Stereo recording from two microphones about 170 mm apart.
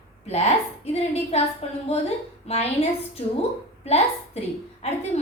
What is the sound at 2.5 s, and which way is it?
Speech, 35° left (ahead or behind).